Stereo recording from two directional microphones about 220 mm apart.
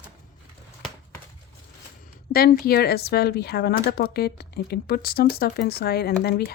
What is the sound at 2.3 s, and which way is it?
Speech, 45° left (ahead or behind).